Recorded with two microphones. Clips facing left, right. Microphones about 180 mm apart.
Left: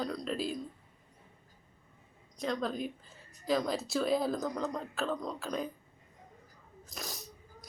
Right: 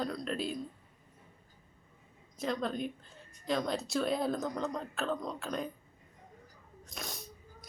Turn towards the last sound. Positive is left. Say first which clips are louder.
# even
turn(degrees=0)  # may be behind; listen again after turning